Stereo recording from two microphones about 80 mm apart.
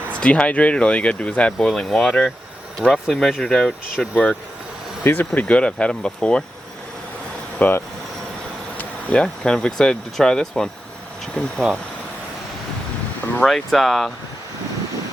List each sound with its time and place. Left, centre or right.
0.1 s speech: centre
1.6 s speech: centre
4.1 s speech: centre
7.6 s speech: centre
8.8 s insect: centre
9.2 s speech: centre
13.4 s speech: centre